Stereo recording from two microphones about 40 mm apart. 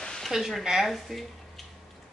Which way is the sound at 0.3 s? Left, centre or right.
Centre.